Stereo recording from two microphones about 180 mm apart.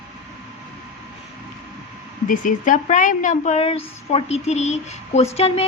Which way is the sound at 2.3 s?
45° left (ahead or behind).